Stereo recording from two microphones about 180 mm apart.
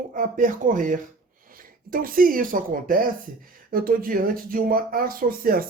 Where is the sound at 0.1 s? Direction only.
50° right (ahead or behind).